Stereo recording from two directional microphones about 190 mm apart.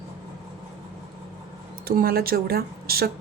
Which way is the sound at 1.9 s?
50° right (ahead or behind).